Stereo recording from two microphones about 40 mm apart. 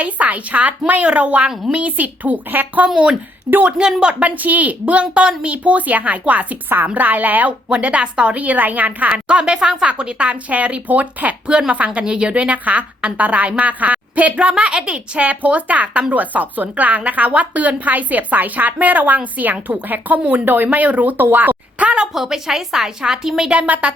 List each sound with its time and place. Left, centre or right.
0.0 s a woman's voice: right
3.8 s a woman's voice: right
4.2 s a woman's voice: right
7.7 s a woman's voice: right
14.5 s a woman's voice: right
21.8 s a woman's voice: right
22.1 s a woman's voice: centre
23.6 s a woman's voice: right